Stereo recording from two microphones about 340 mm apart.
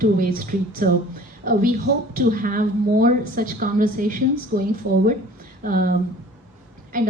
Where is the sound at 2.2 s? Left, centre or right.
Right.